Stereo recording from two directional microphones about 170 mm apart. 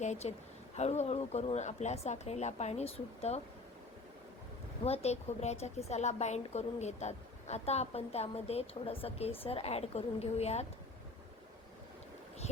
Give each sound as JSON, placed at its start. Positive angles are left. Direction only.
{"t": 0.0, "sound": "a woman's voice", "side_deg": 40}
{"t": 4.8, "sound": "a woman's voice", "side_deg": 40}